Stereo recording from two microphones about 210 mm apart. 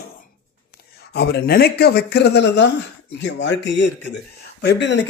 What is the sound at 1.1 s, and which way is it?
Speech, 50° left (ahead or behind).